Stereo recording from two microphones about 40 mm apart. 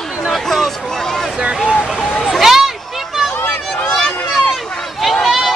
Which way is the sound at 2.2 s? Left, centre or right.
Centre.